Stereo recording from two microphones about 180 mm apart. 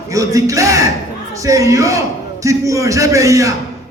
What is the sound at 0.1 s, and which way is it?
A man's voice, 20° right (ahead or behind).